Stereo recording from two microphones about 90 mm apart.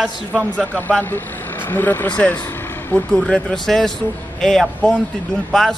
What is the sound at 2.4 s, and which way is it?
Vehicle, 25° left (ahead or behind).